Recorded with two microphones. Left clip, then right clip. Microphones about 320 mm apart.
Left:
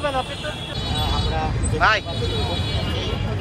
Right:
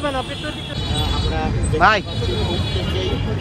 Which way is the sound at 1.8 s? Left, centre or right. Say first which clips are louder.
Right 3 dB; centre.